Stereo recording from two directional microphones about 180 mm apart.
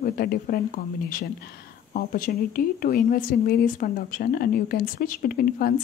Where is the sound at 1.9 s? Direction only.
50° left (ahead or behind).